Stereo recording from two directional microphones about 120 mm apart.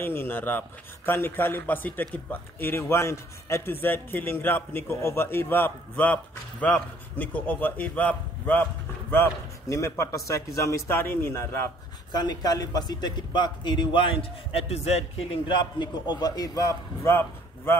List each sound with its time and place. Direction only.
0.0 s a man's voice: 20° left (ahead or behind)
12.1 s a man's voice: 35° left (ahead or behind)
14.5 s speech: 55° left (ahead or behind)
15.4 s a man's voice: 40° left (ahead or behind); by 17.7 s 20° left (ahead or behind)